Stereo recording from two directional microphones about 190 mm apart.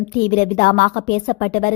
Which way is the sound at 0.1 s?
50° left (ahead or behind).